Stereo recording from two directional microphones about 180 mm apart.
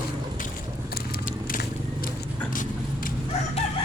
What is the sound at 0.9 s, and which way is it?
Vehicle, 55° left (ahead or behind).